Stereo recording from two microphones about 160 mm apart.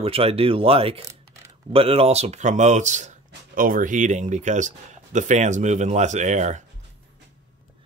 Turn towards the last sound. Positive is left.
turn(degrees=-50)  # may be behind; listen again after turning